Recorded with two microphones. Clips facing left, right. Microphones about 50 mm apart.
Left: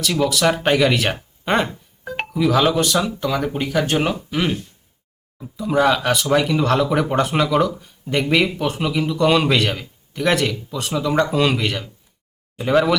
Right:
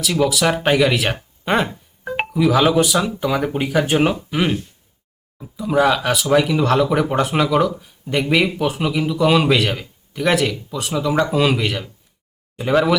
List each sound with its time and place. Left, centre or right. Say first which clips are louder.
0.0 s speech: right 1 dB; centre